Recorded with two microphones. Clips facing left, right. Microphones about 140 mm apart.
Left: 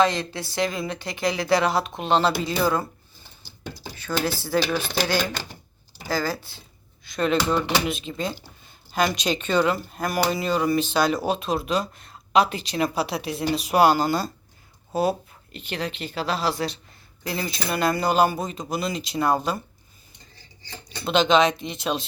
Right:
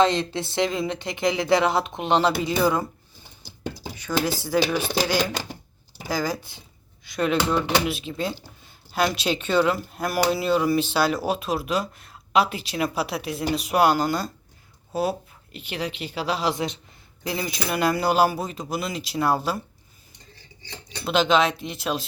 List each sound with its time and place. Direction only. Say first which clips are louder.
0.0 s speech: right 1 dB; 25° right (ahead or behind)
3.8 s speech: right 1 dB; 15° right (ahead or behind)
21.0 s speech: left 1 dB; 5° right (ahead or behind)